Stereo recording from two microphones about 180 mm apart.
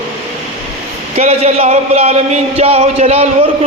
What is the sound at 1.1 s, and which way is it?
A man's voice, 35° right (ahead or behind).